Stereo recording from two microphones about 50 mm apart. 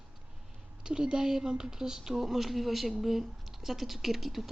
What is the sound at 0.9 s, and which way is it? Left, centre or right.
A woman's voice, centre.